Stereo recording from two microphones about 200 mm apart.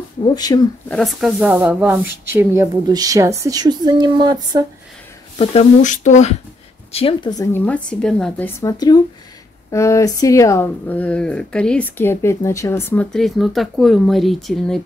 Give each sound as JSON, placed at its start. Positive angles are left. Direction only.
{"t": 0.2, "sound": "speech", "side_deg": 20}
{"t": 0.8, "sound": "speech", "side_deg": 0}
{"t": 5.4, "sound": "speech", "side_deg": 30}
{"t": 7.6, "sound": "speech", "side_deg": 5}